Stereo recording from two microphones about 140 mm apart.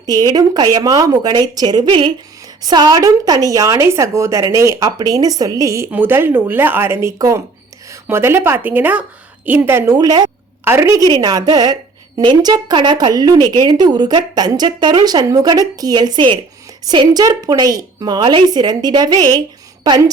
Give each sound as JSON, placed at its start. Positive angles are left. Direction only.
{"t": 0.0, "sound": "a woman's voice", "side_deg": -25}